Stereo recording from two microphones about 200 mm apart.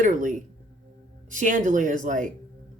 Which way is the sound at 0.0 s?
40° right (ahead or behind).